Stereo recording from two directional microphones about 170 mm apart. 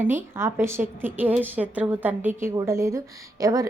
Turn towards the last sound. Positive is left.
turn(degrees=-20)  # may be behind; listen again after turning